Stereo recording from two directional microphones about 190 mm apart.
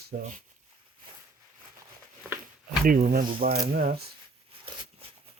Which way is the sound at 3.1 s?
50° right (ahead or behind).